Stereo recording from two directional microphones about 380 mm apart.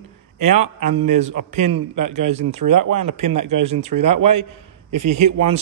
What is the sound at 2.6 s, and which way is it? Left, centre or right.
A man's voice, right.